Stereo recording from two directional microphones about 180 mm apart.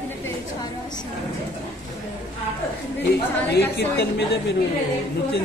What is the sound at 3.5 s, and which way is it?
A woman's voice, 70° left (ahead or behind).